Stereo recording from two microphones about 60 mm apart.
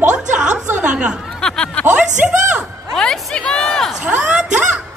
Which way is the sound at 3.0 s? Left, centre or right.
Centre.